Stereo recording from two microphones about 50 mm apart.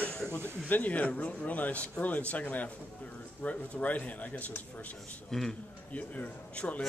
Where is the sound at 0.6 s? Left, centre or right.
Left.